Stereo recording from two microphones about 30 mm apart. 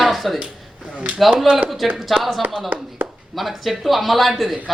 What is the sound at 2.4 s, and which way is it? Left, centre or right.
Speech, right.